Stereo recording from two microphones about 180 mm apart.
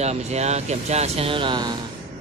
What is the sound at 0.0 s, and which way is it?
Speech, 35° right (ahead or behind).